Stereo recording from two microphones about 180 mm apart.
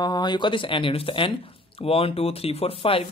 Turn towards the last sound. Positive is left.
turn(degrees=30)  # may be behind; listen again after turning